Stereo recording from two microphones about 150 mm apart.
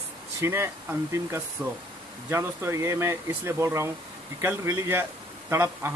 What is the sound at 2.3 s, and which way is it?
A man's voice, 20° right (ahead or behind).